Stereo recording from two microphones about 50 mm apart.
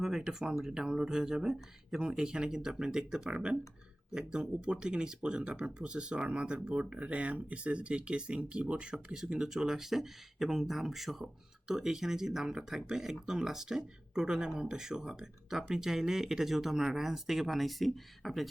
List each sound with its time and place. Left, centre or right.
0.0 s speech: centre
9.0 s speech: centre